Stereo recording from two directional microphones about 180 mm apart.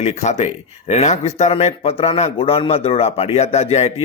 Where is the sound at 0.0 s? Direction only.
40° left (ahead or behind).